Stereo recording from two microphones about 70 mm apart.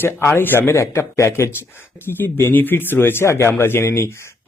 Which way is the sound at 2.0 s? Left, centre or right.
Left.